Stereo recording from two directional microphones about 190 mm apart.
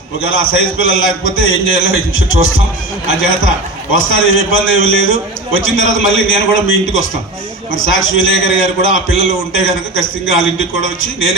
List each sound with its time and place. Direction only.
0.8 s a man's voice: 90° left